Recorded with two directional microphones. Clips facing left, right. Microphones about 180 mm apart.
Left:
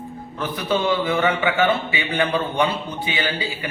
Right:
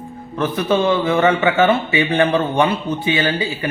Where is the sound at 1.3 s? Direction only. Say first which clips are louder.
Right 5 dB; 45° right (ahead or behind).